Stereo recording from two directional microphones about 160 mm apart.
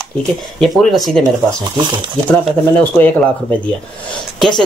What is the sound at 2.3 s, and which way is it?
Speech, 5° left (ahead or behind).